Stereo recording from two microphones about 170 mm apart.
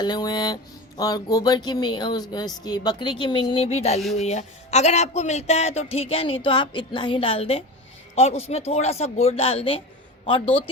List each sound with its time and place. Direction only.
0.0 s speech: 25° left (ahead or behind)